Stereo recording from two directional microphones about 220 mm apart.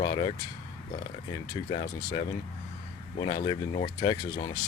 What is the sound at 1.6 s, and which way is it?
Speech, 20° left (ahead or behind).